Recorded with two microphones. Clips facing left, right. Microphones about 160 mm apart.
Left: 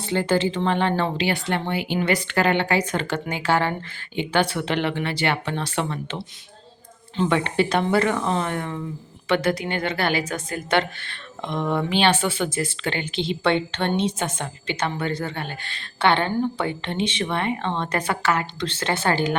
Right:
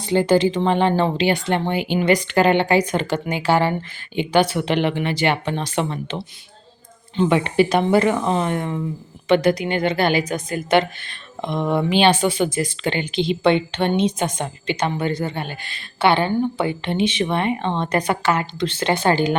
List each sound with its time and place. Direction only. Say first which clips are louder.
0.0 s a woman's voice: right 5 dB; 15° right (ahead or behind)
7.3 s a woman's voice: right 4 dB; 15° right (ahead or behind)